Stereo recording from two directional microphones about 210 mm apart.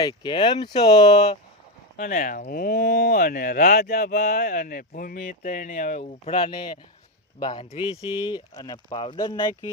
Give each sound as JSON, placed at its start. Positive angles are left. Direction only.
{"t": 0.0, "sound": "speech", "side_deg": 20}
{"t": 2.0, "sound": "speech", "side_deg": 40}